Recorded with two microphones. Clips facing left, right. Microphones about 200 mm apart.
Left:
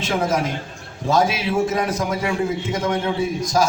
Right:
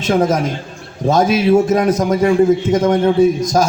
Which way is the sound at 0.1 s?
40° right (ahead or behind).